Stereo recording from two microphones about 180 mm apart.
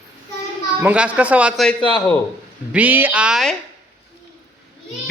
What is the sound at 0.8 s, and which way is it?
Speech, 10° right (ahead or behind).